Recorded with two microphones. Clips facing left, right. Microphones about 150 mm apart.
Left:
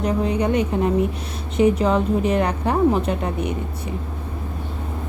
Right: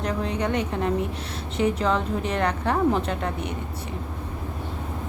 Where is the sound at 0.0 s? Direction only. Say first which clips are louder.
Left 5 dB; 10° left (ahead or behind).